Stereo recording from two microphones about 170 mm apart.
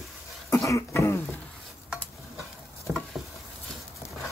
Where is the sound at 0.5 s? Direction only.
15° left (ahead or behind).